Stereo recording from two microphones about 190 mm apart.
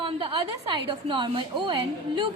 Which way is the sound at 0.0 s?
25° right (ahead or behind).